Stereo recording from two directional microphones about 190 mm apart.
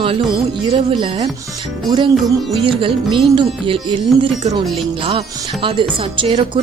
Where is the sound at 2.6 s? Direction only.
25° right (ahead or behind).